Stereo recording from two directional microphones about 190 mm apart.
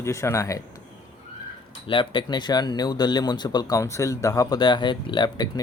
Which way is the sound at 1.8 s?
25° left (ahead or behind).